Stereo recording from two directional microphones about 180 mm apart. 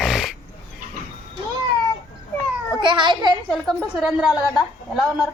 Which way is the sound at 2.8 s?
25° right (ahead or behind).